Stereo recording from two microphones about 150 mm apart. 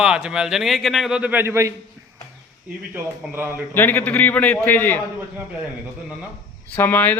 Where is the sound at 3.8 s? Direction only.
15° left (ahead or behind).